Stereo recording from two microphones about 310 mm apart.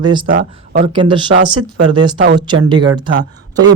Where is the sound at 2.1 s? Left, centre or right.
Right.